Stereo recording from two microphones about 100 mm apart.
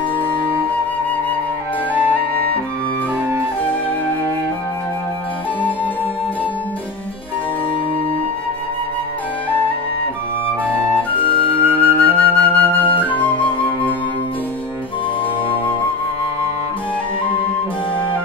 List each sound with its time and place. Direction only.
11.1 s flute: 60° left (ahead or behind)
11.4 s flute: 20° right (ahead or behind)
12.0 s flute: 15° left (ahead or behind)